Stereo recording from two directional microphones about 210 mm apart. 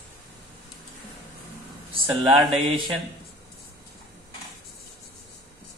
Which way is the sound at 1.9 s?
20° right (ahead or behind).